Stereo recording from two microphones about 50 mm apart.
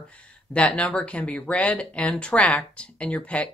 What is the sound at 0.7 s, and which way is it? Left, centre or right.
Speech, left.